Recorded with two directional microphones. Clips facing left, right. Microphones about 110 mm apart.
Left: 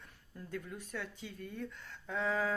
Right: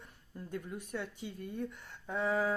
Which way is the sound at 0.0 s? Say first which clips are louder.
Right 3 dB; 20° right (ahead or behind).